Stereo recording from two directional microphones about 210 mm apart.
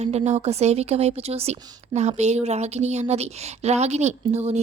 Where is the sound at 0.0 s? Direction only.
30° right (ahead or behind).